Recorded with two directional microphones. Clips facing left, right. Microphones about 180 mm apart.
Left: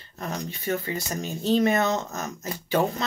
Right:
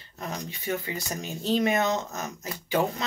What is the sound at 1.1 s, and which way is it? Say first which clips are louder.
Speech: left 3 dB; 15° right (ahead or behind).